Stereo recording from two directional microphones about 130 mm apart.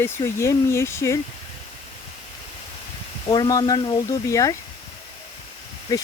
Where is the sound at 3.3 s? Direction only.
30° left (ahead or behind).